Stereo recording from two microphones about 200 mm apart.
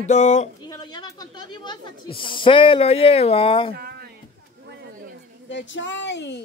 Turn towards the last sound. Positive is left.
turn(degrees=60)  # may be behind; listen again after turning